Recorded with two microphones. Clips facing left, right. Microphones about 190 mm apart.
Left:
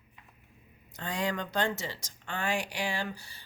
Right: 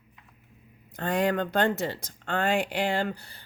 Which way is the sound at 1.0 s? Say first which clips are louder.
Right 7 dB; 55° right (ahead or behind).